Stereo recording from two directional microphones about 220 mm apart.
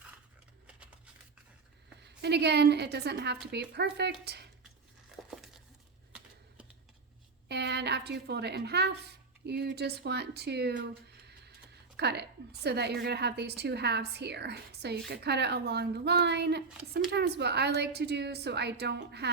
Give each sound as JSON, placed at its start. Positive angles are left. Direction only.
{"t": 2.0, "sound": "a woman's voice", "side_deg": -50}
{"t": 5.3, "sound": "crumpling", "side_deg": 0}
{"t": 7.4, "sound": "a woman's voice", "side_deg": -50}
{"t": 11.9, "sound": "a woman's voice", "side_deg": -50}